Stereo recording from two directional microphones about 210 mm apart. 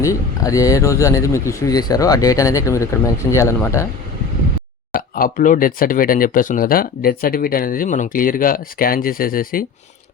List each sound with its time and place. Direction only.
0.0 s speech: 15° left (ahead or behind)
4.9 s speech: 40° left (ahead or behind)